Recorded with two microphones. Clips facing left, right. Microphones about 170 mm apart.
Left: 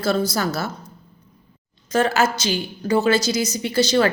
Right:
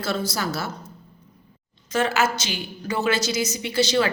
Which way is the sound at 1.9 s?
40° left (ahead or behind).